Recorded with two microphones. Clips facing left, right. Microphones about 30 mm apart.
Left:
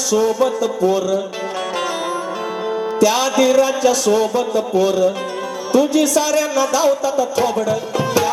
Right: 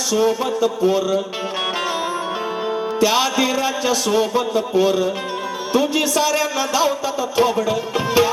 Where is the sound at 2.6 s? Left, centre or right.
Centre.